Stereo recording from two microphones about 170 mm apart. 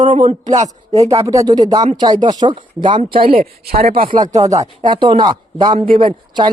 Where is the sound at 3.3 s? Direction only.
65° right (ahead or behind).